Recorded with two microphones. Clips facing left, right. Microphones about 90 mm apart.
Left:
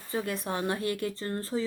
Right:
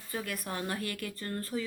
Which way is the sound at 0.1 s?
25° left (ahead or behind).